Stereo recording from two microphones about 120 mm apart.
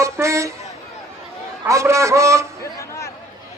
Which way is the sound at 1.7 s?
25° right (ahead or behind).